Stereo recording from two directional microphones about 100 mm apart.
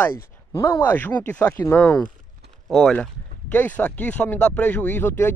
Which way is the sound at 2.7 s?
5° left (ahead or behind).